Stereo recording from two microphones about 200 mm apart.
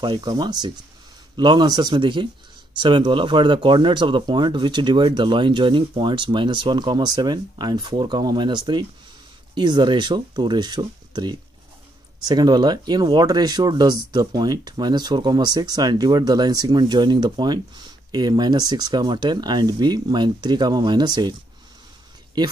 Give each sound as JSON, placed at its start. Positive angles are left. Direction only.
{"t": 0.0, "sound": "speech", "side_deg": -20}